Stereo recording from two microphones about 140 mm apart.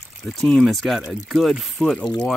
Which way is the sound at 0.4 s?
5° left (ahead or behind).